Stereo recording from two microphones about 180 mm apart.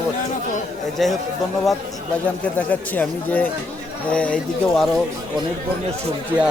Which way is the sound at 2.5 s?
10° left (ahead or behind).